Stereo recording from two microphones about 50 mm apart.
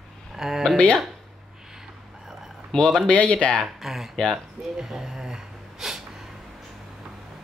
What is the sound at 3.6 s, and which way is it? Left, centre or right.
Speech, centre.